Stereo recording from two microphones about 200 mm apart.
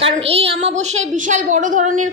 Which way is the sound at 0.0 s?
30° right (ahead or behind).